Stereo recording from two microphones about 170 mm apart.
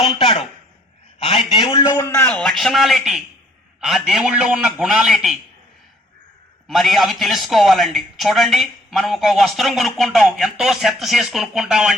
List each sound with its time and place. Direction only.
0.0 s a man's voice: 30° left (ahead or behind); by 5.4 s centre (ahead or behind)
6.7 s a man's voice: centre (ahead or behind)